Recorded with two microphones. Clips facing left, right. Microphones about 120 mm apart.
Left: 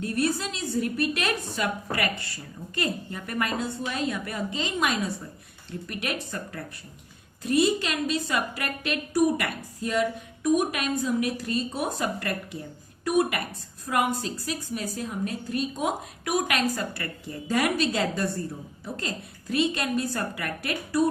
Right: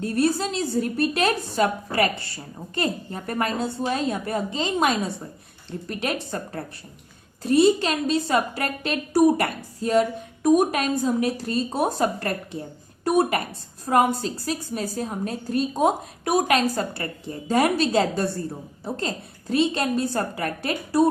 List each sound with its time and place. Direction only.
0.0 s a woman's voice: 30° right (ahead or behind)